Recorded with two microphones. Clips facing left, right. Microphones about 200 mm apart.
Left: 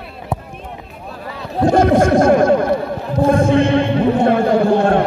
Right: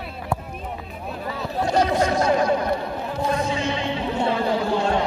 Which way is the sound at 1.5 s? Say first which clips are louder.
Left 8 dB; 55° left (ahead or behind).